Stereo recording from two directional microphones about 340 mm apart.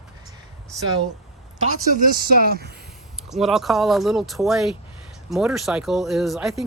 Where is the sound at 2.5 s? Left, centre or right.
Right.